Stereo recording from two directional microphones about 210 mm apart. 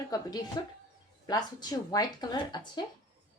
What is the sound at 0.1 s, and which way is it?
Speech, 15° left (ahead or behind).